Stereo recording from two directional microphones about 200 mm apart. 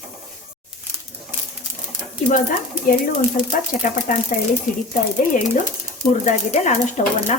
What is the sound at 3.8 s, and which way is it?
Speech, 45° left (ahead or behind).